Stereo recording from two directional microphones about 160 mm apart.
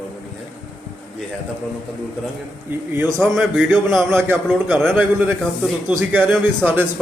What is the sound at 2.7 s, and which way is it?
A man's voice, 15° right (ahead or behind).